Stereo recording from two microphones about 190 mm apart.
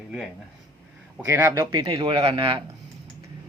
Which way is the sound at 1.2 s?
15° right (ahead or behind).